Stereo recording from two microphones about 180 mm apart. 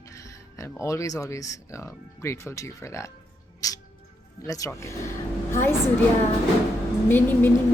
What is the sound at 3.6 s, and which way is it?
Music, 20° left (ahead or behind).